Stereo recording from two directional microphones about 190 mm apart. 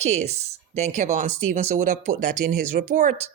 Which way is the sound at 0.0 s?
35° right (ahead or behind).